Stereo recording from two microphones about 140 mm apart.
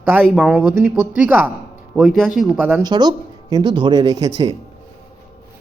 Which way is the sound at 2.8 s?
30° right (ahead or behind).